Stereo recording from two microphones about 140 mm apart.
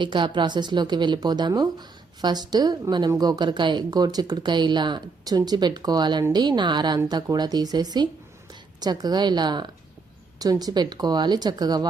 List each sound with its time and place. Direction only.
0.0 s a woman's voice: 35° right (ahead or behind)